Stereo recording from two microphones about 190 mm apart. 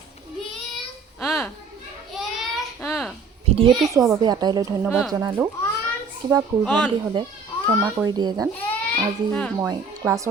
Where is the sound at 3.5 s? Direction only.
25° right (ahead or behind).